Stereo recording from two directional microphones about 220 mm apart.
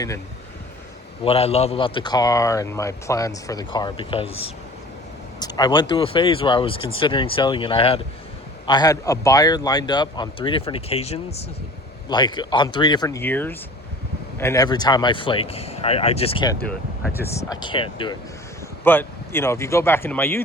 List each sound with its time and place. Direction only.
1.2 s a man's voice: 25° left (ahead or behind)
18.9 s speech: 10° left (ahead or behind)